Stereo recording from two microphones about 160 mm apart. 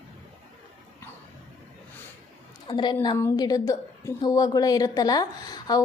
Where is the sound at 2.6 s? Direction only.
30° left (ahead or behind).